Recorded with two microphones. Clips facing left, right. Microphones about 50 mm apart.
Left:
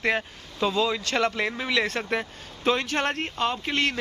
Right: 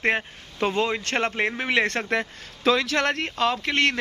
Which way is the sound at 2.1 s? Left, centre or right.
Right.